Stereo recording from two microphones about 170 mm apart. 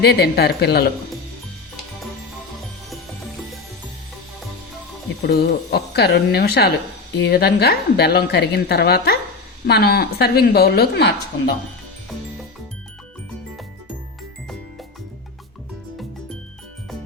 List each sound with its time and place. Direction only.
0.0 s a woman's voice: 70° left (ahead or behind)
5.2 s a woman's voice: 70° left (ahead or behind)